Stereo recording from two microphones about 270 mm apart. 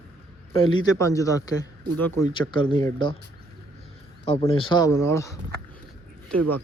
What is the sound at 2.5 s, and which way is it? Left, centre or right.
Speech, centre.